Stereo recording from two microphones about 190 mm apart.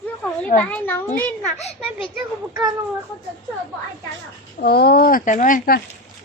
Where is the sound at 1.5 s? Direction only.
35° left (ahead or behind).